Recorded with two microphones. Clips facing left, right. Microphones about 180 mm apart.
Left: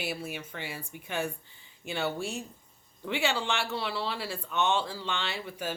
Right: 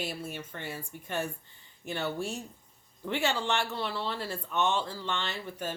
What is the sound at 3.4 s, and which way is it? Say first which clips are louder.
Speech: right 1 dB; 90° left.